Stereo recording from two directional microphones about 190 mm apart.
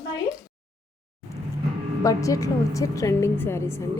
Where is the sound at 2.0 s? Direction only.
15° left (ahead or behind).